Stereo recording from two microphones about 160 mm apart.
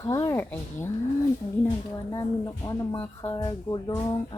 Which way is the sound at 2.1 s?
20° left (ahead or behind).